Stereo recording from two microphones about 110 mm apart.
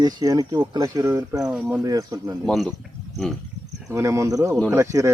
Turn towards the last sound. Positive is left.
turn(degrees=-25)  # may be behind; listen again after turning